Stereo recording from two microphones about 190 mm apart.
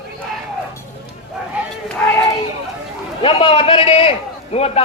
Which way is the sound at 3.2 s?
30° left (ahead or behind).